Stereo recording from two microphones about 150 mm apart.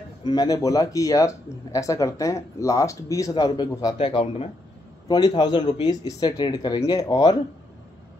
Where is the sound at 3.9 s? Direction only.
35° left (ahead or behind).